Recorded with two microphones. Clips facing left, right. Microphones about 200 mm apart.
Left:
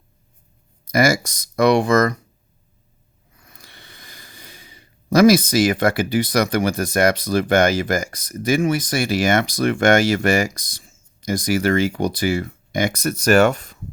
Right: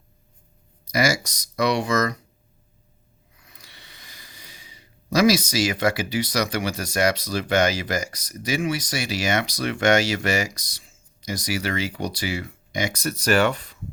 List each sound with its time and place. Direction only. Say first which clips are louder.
0.9 s speech: left 5 dB; 50° left (ahead or behind)
3.4 s speech: left 4 dB; 50° left (ahead or behind)